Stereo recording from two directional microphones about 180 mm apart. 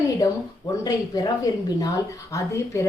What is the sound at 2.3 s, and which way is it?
Speech, 20° left (ahead or behind).